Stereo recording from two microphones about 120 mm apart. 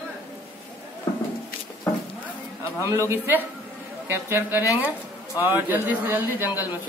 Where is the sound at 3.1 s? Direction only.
15° right (ahead or behind).